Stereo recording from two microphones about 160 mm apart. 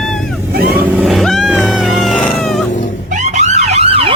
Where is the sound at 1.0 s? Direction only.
Centre (ahead or behind).